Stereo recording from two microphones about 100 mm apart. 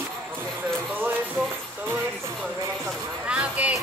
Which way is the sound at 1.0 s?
20° right (ahead or behind).